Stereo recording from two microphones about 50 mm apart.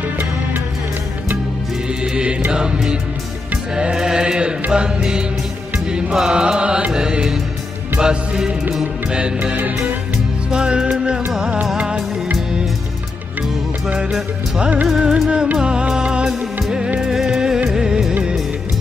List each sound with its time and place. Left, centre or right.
2.5 s mantra: centre
5.9 s music: centre
8.0 s mantra: centre
9.1 s music: centre
11.7 s music of bollywood: right
14.6 s music: right
14.9 s mantra: centre
15.5 s music: centre